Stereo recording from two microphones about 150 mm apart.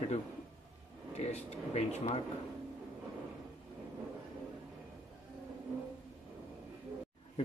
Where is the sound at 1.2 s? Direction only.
45° left (ahead or behind).